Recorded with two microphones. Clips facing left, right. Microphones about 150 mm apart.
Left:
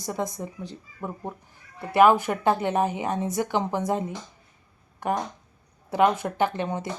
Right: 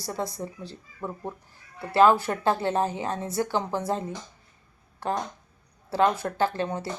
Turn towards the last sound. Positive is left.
turn(degrees=20)  # may be behind; listen again after turning